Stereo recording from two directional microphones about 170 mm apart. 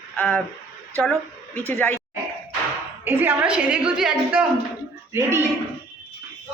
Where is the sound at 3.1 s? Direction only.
10° right (ahead or behind).